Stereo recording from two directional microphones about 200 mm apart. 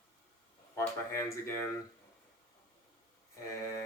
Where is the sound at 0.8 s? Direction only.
15° left (ahead or behind).